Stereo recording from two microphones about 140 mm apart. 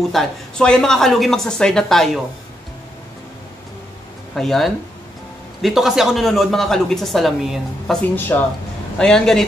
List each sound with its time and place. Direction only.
0.1 s speech: 5° left (ahead or behind)
4.4 s speech: centre (ahead or behind)
8.3 s a man's voice: 15° left (ahead or behind)
8.9 s speech: 5° left (ahead or behind)